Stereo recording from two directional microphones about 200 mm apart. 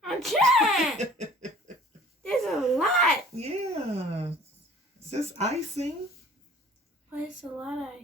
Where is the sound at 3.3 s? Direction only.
30° right (ahead or behind).